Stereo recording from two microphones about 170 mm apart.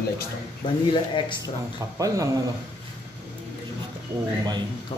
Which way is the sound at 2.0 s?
20° right (ahead or behind).